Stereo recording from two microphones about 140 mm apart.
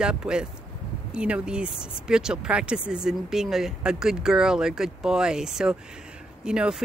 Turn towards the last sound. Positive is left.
turn(degrees=-5)  # may be behind; listen again after turning